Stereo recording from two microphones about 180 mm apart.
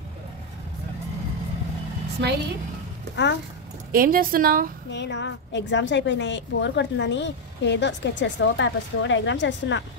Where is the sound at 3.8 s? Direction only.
55° right (ahead or behind).